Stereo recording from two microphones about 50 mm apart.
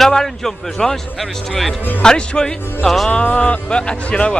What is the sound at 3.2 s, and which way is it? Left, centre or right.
A man's voice, left.